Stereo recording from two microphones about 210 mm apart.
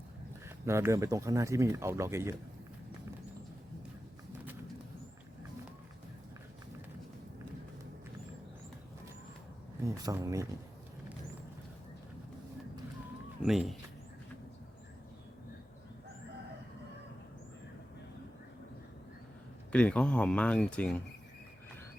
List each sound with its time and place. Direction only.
0.4 s speech: 10° right (ahead or behind)
9.8 s speech: 15° right (ahead or behind)
13.4 s speech: centre (ahead or behind)
19.7 s speech: 5° left (ahead or behind)